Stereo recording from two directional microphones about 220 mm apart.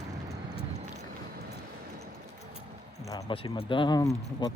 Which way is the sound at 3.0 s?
15° left (ahead or behind).